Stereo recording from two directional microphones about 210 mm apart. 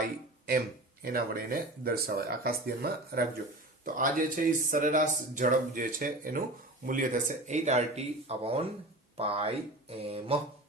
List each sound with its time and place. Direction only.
1.0 s speech: 45° right (ahead or behind); by 8.6 s 30° right (ahead or behind)
9.1 s mantra: 25° right (ahead or behind)